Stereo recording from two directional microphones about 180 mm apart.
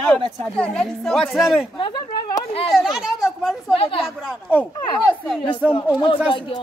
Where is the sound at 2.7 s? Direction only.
Centre (ahead or behind).